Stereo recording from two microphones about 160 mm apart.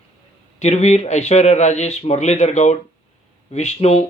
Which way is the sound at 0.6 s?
45° left (ahead or behind).